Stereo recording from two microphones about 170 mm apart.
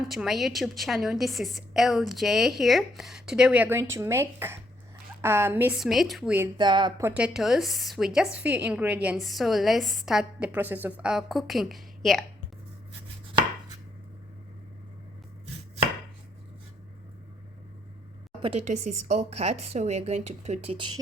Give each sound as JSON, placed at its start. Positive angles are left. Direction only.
{"t": 0.1, "sound": "a woman's voice", "side_deg": 0}
{"t": 5.8, "sound": "a woman's voice", "side_deg": 0}
{"t": 6.6, "sound": "speech", "side_deg": -25}
{"t": 7.0, "sound": "a woman's voice", "side_deg": -5}
{"t": 18.4, "sound": "a woman's voice", "side_deg": -40}